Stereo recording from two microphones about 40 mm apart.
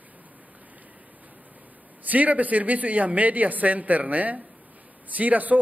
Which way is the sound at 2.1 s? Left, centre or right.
Right.